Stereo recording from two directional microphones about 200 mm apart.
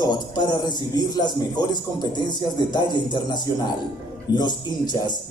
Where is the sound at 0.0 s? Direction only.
20° left (ahead or behind).